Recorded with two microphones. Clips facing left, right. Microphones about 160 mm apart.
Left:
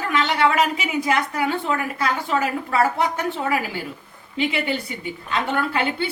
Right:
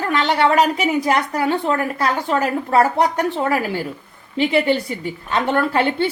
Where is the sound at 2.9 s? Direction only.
40° right (ahead or behind).